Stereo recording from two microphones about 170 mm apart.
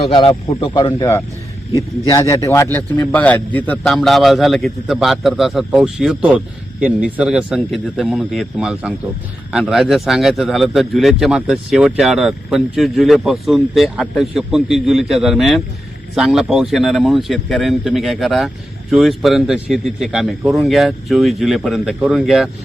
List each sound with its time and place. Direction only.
0.0 s a man's voice: 30° left (ahead or behind); by 22.4 s centre (ahead or behind)